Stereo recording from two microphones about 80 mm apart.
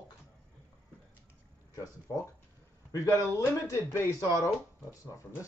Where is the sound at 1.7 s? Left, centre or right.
Left.